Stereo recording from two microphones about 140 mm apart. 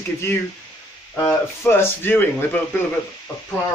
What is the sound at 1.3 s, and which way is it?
Speech, 15° left (ahead or behind).